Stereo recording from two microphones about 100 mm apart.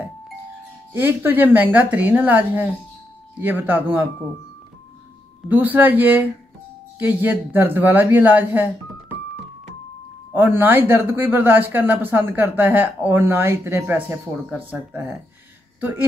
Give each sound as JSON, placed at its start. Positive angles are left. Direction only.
{"t": 0.9, "sound": "speech", "side_deg": -20}
{"t": 5.5, "sound": "speech", "side_deg": -15}
{"t": 10.3, "sound": "speech", "side_deg": -20}